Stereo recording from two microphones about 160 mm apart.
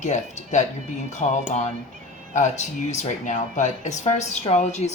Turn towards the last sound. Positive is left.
turn(degrees=45)  # may be behind; listen again after turning